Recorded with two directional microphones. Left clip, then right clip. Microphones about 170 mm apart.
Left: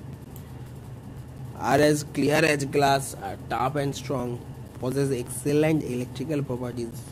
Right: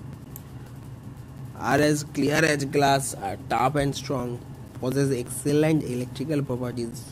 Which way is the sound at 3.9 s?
5° right (ahead or behind).